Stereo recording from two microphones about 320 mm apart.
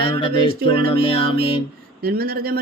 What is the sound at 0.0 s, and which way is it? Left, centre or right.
Music, centre.